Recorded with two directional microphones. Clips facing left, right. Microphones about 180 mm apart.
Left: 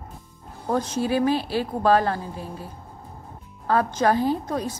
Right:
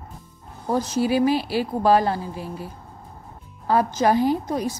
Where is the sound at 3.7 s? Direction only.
10° right (ahead or behind).